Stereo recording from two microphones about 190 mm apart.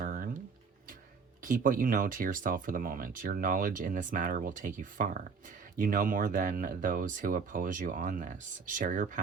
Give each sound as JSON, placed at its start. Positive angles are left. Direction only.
{"t": 0.0, "sound": "music", "side_deg": -45}
{"t": 1.5, "sound": "speech", "side_deg": -45}